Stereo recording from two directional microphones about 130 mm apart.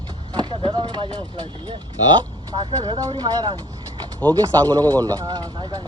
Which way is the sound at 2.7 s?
40° right (ahead or behind).